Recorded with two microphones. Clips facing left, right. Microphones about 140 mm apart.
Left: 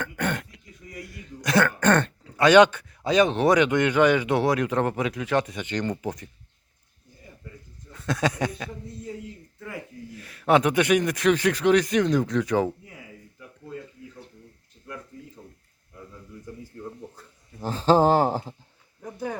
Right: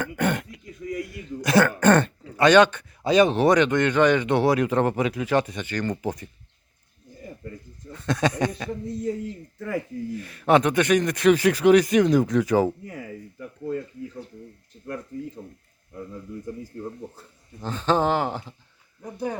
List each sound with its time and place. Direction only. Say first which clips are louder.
0.0 s throat clearing: right 4 dB; 10° right (ahead or behind)
1.4 s a man's voice: right 3 dB; 5° right (ahead or behind)
2.3 s a man's voice: even; 5° left (ahead or behind)
3.0 s a man's voice: right 2 dB; centre (ahead or behind)
3.6 s a man's voice: even; 10° left (ahead or behind)
5.5 s speech: even; 20° left (ahead or behind)
6.0 s a man's voice: right 2 dB; 5° right (ahead or behind)
7.9 s a man's voice: right 2 dB; 5° left (ahead or behind)
9.6 s speech: right 9 dB; 50° right (ahead or behind)
10.2 s a man's voice: right 1 dB; centre (ahead or behind)
12.8 s a sound: right 9 dB; 60° right (ahead or behind)
17.6 s speech: left 3 dB; 35° left (ahead or behind)
19.1 s speech: right 2 dB; 15° right (ahead or behind)